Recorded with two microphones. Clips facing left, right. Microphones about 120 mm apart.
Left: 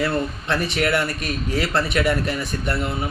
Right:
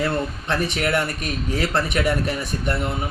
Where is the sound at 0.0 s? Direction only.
15° right (ahead or behind).